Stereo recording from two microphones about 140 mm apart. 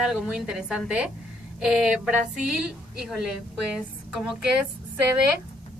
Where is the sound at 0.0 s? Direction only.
5° right (ahead or behind).